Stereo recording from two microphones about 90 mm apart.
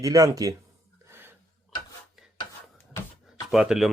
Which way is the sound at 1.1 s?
25° right (ahead or behind).